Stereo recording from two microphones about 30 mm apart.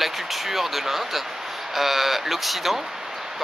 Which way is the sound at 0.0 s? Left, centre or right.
Centre.